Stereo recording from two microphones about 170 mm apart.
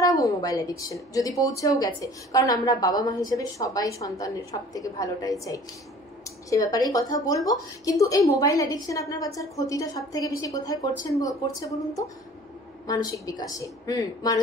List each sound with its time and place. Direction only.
0.0 s a woman's voice: 20° left (ahead or behind)